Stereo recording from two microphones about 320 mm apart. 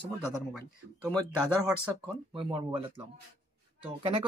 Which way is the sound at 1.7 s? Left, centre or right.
Centre.